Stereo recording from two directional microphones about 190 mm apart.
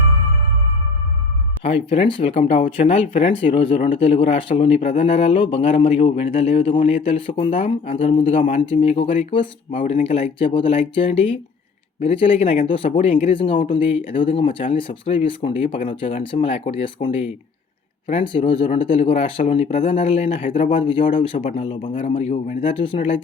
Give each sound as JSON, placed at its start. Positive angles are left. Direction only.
{"t": 1.6, "sound": "speech", "side_deg": 30}